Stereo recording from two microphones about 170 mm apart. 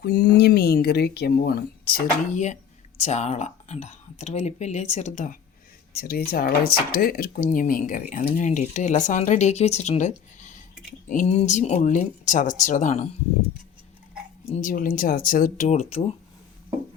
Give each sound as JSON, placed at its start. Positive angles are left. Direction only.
{"t": 0.0, "sound": "speech", "side_deg": 70}
{"t": 2.3, "sound": "speech", "side_deg": 45}
{"t": 5.9, "sound": "speech", "side_deg": 65}
{"t": 14.5, "sound": "speech", "side_deg": 55}